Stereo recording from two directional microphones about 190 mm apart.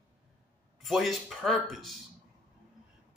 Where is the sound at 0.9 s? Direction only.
Centre (ahead or behind).